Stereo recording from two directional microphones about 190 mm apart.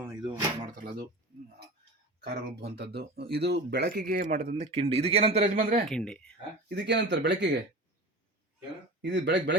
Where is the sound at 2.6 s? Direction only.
60° right (ahead or behind).